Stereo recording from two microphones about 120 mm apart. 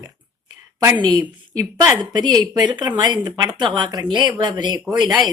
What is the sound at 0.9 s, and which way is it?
Speech, 35° right (ahead or behind).